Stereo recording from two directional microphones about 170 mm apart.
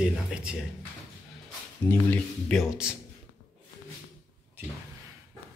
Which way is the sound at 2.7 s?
5° right (ahead or behind).